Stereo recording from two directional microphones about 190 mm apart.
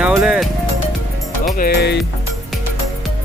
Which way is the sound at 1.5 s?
55° left (ahead or behind).